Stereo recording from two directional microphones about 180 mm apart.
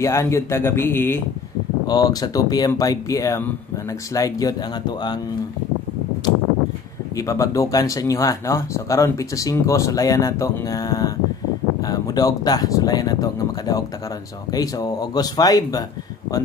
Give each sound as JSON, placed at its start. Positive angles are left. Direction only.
{"t": 0.0, "sound": "speech", "side_deg": 15}
{"t": 7.2, "sound": "speech", "side_deg": 20}